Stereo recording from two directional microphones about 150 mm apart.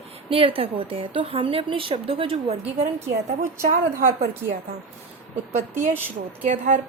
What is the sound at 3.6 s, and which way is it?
Speech, 65° right (ahead or behind).